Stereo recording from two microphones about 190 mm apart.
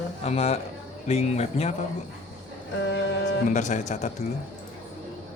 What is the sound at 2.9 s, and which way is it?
Speech, 65° left (ahead or behind).